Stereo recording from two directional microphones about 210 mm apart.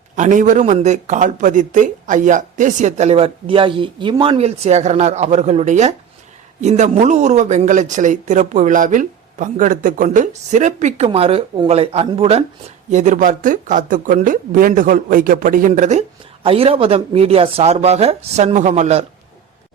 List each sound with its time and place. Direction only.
0.2 s speech: 40° right (ahead or behind)